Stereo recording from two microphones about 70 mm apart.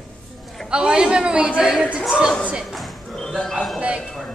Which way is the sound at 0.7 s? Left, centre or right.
Centre.